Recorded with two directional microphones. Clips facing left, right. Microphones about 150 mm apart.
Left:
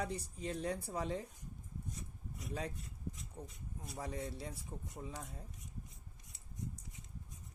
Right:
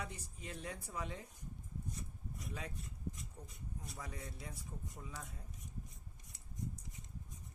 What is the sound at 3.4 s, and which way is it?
Speech, 30° left (ahead or behind).